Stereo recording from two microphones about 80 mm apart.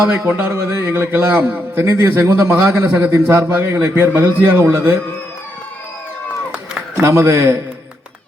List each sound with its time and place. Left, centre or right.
0.3 s a man's voice: right
3.1 s a man's voice: right
7.0 s a man's voice: right